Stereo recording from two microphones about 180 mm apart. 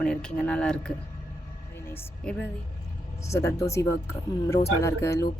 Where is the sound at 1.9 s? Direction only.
10° left (ahead or behind).